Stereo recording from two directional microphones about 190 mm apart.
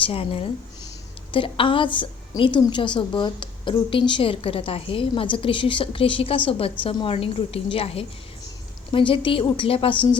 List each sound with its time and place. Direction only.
0.0 s a woman's voice: 30° left (ahead or behind)